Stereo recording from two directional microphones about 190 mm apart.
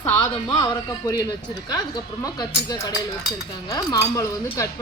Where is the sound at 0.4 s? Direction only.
20° left (ahead or behind).